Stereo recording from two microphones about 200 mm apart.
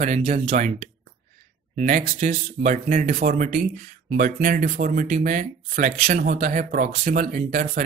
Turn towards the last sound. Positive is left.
turn(degrees=-40)  # may be behind; listen again after turning